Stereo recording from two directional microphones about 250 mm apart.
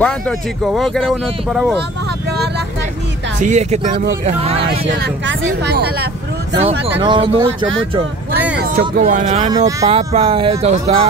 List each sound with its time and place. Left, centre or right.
0.0 s speech: centre
3.3 s speech: right
4.6 s speech: right
6.6 s speech: centre
8.5 s speech: right